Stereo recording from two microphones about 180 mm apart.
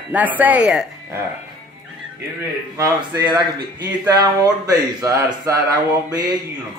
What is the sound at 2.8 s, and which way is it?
Speech, 25° right (ahead or behind).